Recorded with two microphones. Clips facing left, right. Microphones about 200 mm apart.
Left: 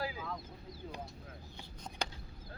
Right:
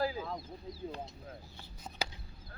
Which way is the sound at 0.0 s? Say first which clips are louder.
Right 5 dB; 35° right (ahead or behind).